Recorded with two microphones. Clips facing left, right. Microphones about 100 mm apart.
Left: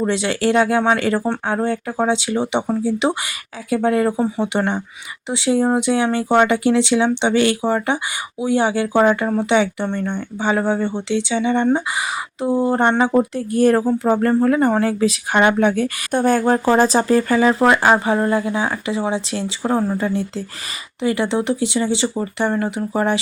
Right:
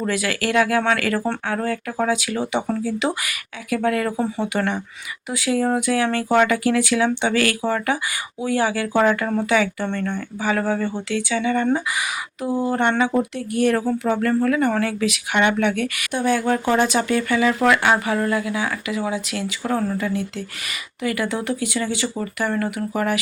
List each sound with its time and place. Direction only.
0.0 s speech: 25° left (ahead or behind)
16.1 s speech: 45° left (ahead or behind); by 23.1 s 25° left (ahead or behind)